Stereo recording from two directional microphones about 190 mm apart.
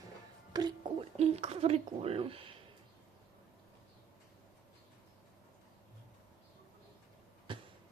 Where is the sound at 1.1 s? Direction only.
35° right (ahead or behind).